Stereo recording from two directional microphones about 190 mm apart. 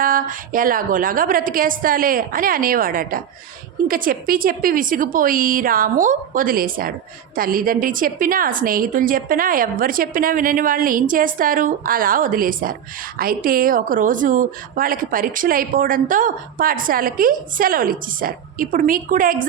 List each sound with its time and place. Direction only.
0.0 s speech: 45° right (ahead or behind)